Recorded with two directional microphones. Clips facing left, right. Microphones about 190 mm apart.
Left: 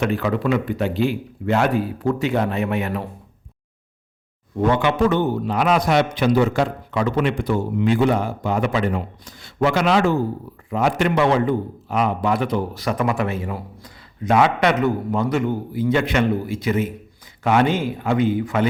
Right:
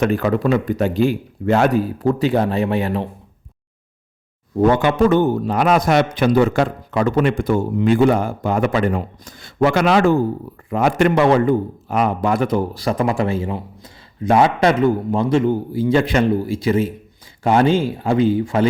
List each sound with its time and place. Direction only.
0.0 s a man's voice: 45° right (ahead or behind); by 3.1 s 30° right (ahead or behind)
4.5 s a man's voice: 40° right (ahead or behind)
12.7 s a man's voice: 30° right (ahead or behind)